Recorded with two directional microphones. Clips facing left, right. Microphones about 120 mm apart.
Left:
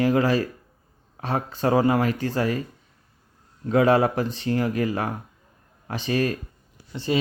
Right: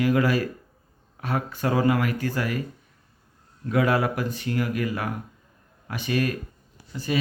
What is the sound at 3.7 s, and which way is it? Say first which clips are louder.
Speech: left 4 dB; 30° left (ahead or behind).